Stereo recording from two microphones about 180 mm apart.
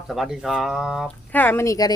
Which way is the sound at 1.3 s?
10° left (ahead or behind).